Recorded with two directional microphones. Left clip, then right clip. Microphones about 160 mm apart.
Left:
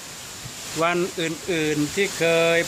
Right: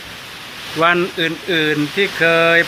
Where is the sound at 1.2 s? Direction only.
25° left (ahead or behind).